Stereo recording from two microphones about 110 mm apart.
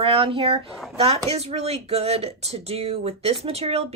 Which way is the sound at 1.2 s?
70° right (ahead or behind).